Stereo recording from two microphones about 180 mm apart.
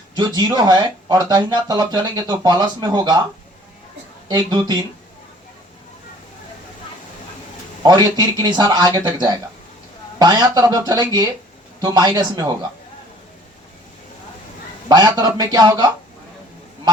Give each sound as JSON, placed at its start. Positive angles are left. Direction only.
{"t": 0.2, "sound": "speech", "side_deg": -20}
{"t": 4.3, "sound": "speech", "side_deg": -25}
{"t": 7.9, "sound": "speech", "side_deg": -25}
{"t": 14.8, "sound": "speech", "side_deg": -20}